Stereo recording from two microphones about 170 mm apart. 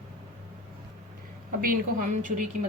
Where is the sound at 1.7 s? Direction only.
50° right (ahead or behind).